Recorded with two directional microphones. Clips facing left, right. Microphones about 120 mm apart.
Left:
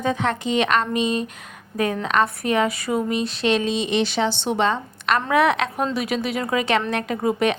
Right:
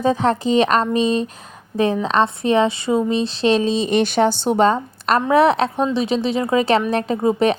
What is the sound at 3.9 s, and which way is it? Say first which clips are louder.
A woman's voice: right 6 dB; 50° right (ahead or behind).